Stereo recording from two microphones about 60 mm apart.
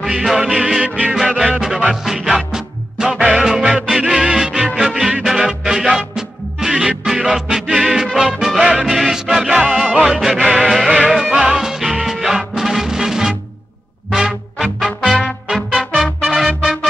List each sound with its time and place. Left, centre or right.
0.0 s music: centre
0.8 s music: right
1.1 s music: centre
14.8 s music: centre